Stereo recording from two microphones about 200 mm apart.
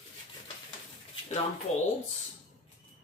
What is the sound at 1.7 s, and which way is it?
Speech, 30° left (ahead or behind).